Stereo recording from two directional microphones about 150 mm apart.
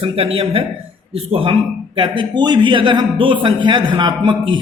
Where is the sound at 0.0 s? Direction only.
35° right (ahead or behind).